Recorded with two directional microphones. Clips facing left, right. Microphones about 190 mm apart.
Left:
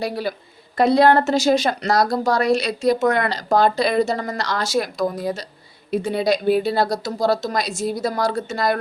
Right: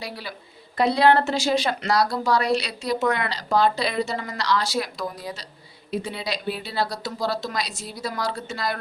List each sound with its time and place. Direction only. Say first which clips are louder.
0.0 s a woman's voice: left 10 dB; 45° left (ahead or behind)